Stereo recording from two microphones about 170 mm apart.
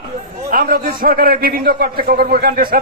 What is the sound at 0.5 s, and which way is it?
A man's voice, 60° right (ahead or behind).